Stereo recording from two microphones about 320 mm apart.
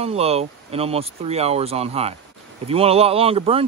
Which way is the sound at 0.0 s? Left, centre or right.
Centre.